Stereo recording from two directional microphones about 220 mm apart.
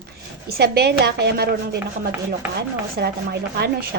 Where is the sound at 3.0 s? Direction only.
45° right (ahead or behind).